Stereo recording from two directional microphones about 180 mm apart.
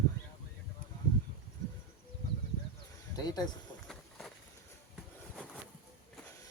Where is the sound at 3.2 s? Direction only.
20° left (ahead or behind).